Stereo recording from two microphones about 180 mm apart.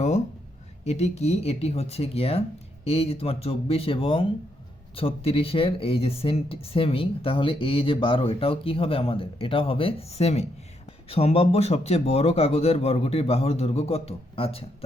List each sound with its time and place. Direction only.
0.9 s speech: 35° left (ahead or behind)